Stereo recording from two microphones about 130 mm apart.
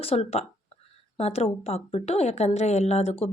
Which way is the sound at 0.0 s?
50° left (ahead or behind).